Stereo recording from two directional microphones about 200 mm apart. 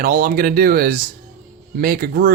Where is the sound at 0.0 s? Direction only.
45° right (ahead or behind).